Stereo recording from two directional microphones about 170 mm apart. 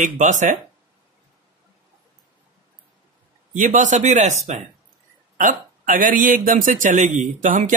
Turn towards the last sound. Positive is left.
turn(degrees=-50)  # may be behind; listen again after turning